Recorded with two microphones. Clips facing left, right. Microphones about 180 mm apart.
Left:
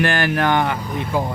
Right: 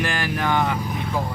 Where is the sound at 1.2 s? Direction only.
75° left (ahead or behind).